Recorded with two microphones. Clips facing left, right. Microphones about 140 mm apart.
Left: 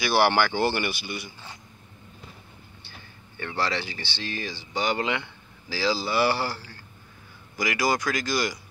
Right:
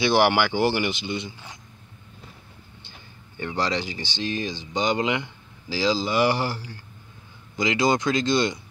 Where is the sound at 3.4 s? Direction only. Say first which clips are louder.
Right 2 dB; 15° right (ahead or behind).